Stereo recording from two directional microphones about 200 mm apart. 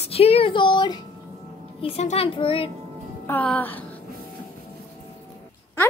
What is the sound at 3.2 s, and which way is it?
Speech, 10° left (ahead or behind).